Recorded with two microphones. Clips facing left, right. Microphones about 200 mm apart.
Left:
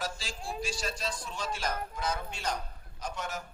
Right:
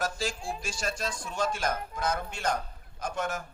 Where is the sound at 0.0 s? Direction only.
45° right (ahead or behind).